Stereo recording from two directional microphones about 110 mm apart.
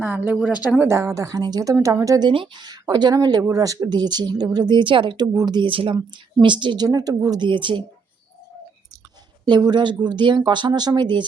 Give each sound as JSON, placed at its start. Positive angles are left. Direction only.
{"t": 0.0, "sound": "speech", "side_deg": -15}
{"t": 0.9, "sound": "speech", "side_deg": -25}
{"t": 9.5, "sound": "speech", "side_deg": -40}